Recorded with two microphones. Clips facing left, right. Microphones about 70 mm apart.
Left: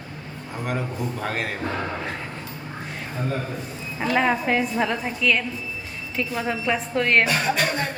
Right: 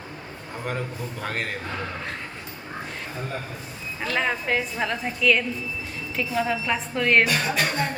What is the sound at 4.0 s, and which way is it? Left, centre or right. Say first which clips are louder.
A woman's voice: left 5 dB; centre.